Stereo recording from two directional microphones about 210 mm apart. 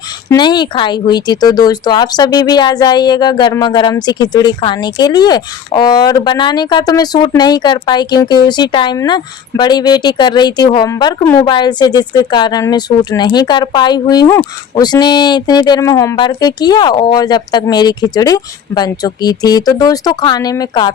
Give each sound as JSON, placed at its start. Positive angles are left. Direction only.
{"t": 0.3, "sound": "speech", "side_deg": 20}